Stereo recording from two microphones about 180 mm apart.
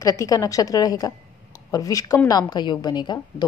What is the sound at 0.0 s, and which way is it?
A woman's voice, 20° left (ahead or behind).